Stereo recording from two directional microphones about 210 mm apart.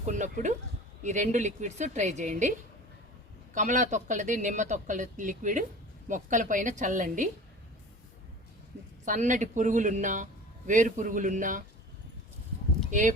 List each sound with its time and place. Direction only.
0.0 s speech: 35° right (ahead or behind)
9.0 s speech: 35° right (ahead or behind)
12.9 s speech: 35° right (ahead or behind)